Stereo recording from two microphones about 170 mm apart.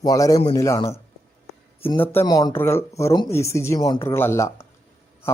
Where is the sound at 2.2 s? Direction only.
25° left (ahead or behind).